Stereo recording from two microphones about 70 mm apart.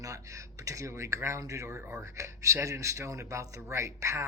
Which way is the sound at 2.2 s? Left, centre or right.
Right.